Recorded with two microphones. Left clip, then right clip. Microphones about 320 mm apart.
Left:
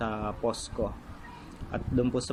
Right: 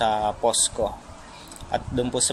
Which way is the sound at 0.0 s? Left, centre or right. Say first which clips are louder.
Right 10 dB; right.